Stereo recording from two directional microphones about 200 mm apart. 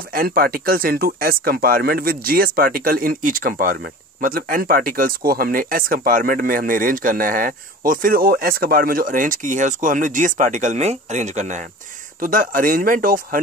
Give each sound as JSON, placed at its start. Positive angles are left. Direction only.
{"t": 0.1, "sound": "speech", "side_deg": -45}